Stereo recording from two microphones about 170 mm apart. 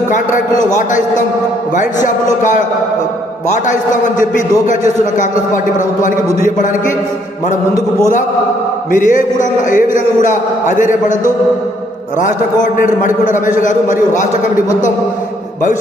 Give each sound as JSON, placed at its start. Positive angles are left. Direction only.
{"t": 0.8, "sound": "a man's voice", "side_deg": 50}
{"t": 3.7, "sound": "a man's voice", "side_deg": 50}
{"t": 8.9, "sound": "a man's voice", "side_deg": 50}
{"t": 12.6, "sound": "a man's voice", "side_deg": 50}